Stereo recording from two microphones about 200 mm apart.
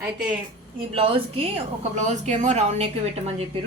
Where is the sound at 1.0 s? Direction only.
25° right (ahead or behind).